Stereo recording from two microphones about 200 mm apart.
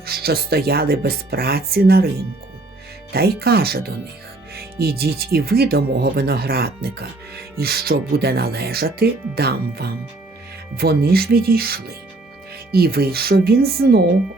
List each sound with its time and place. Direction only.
0.0 s speech: 50° right (ahead or behind)
3.1 s speech: 50° right (ahead or behind)